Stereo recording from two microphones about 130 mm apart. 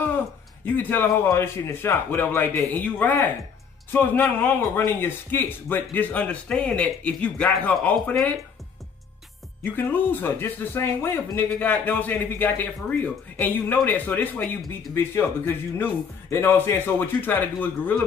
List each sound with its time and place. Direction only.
0.7 s speech: 15° left (ahead or behind)
9.6 s speech: 15° left (ahead or behind)